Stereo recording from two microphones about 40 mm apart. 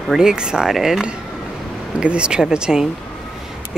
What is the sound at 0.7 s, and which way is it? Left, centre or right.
Speech, centre.